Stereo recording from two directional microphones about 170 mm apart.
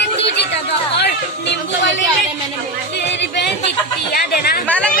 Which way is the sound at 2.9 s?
90° left.